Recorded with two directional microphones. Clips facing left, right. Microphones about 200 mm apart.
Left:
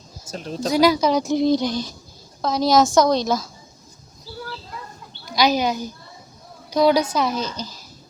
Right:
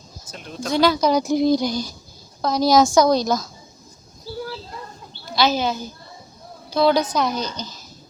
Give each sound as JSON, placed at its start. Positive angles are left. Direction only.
{"t": 0.3, "sound": "speech", "side_deg": 35}
{"t": 0.7, "sound": "speech", "side_deg": 15}
{"t": 1.1, "sound": "a woman's voice", "side_deg": 0}
{"t": 5.3, "sound": "speech", "side_deg": 15}